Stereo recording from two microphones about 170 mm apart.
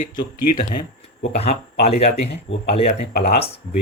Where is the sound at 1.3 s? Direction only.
40° left (ahead or behind).